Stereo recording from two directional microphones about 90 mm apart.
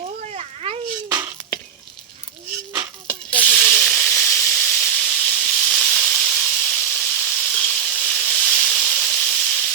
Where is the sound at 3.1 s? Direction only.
15° left (ahead or behind).